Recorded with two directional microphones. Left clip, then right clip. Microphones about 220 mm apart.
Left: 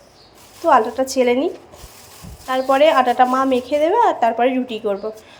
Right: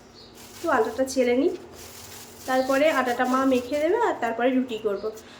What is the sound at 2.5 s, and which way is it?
A woman's voice, 20° left (ahead or behind).